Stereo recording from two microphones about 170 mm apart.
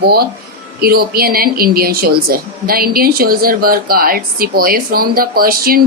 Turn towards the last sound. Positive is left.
turn(degrees=-60)  # may be behind; listen again after turning